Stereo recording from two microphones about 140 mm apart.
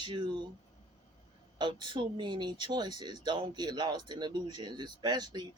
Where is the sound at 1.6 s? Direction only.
35° right (ahead or behind).